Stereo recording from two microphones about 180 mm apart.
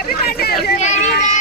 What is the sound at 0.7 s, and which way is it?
Speech, 40° left (ahead or behind).